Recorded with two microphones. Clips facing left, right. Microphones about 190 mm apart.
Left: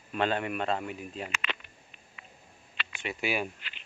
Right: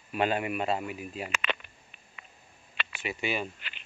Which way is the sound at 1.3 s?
55° right (ahead or behind).